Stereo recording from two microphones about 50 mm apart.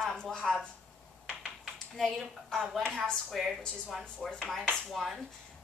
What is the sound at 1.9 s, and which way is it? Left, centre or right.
Speech, centre.